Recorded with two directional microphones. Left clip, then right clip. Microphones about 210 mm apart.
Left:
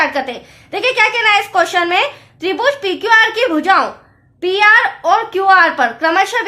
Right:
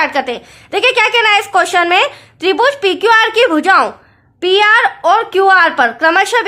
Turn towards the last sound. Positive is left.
turn(degrees=-40)  # may be behind; listen again after turning